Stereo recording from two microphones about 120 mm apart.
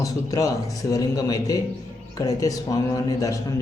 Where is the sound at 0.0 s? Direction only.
30° left (ahead or behind).